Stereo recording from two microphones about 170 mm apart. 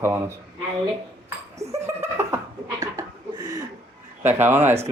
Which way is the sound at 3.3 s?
25° right (ahead or behind).